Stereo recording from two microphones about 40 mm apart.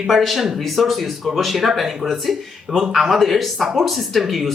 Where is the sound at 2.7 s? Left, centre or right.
Centre.